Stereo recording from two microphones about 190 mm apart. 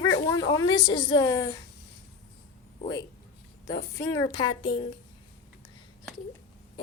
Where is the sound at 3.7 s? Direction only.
15° left (ahead or behind).